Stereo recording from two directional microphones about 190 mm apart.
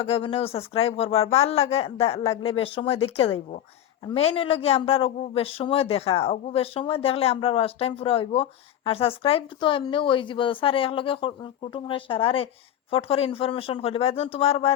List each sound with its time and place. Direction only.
0.0 s speech: 30° left (ahead or behind)